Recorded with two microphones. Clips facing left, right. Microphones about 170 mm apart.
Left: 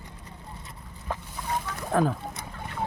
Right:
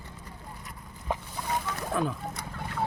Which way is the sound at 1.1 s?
15° right (ahead or behind).